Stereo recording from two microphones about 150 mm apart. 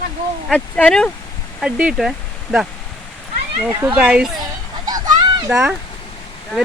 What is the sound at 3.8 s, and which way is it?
Speech, 10° right (ahead or behind).